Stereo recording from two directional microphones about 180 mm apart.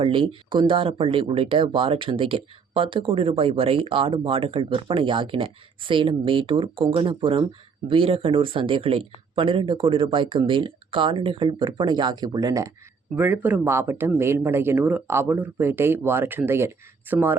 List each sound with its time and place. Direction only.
0.0 s speech: 30° right (ahead or behind); by 17.3 s 10° right (ahead or behind)